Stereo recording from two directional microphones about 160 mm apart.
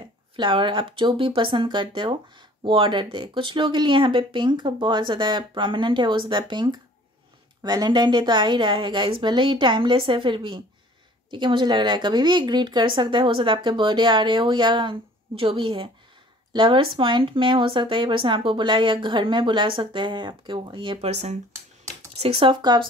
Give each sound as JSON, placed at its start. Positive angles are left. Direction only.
{"t": 0.4, "sound": "a woman's voice", "side_deg": -30}